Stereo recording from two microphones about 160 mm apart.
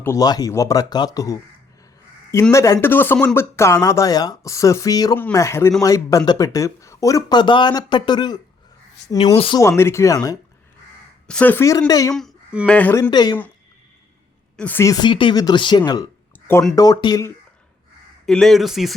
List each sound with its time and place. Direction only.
0.0 s speech: 20° left (ahead or behind)
2.5 s speech: 20° left (ahead or behind)
9.3 s speech: 35° left (ahead or behind)
9.6 s speech: 15° left (ahead or behind)
11.3 s speech: 10° left (ahead or behind)
12.6 s speech: 10° left (ahead or behind)
13.0 s speech: 25° left (ahead or behind)
14.5 s speech: 10° left (ahead or behind)
14.8 s speech: 25° left (ahead or behind)
18.3 s speech: centre (ahead or behind)